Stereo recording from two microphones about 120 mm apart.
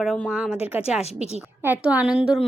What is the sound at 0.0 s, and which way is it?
A woman's voice, centre (ahead or behind).